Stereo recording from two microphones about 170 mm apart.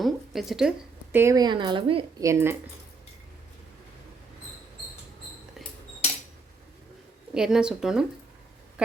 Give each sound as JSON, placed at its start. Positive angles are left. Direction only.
{"t": 0.0, "sound": "a sound", "side_deg": 0}
{"t": 1.1, "sound": "a woman's voice", "side_deg": -15}
{"t": 2.2, "sound": "speech", "side_deg": -15}
{"t": 7.3, "sound": "a woman's voice", "side_deg": -5}